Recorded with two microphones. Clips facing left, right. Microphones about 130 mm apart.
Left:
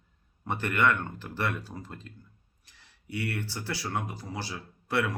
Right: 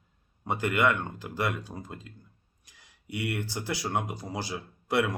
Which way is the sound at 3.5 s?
20° right (ahead or behind).